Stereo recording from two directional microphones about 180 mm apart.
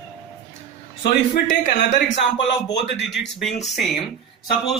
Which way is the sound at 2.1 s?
90° left.